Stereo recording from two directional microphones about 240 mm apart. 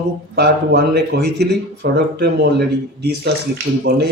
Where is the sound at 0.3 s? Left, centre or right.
Right.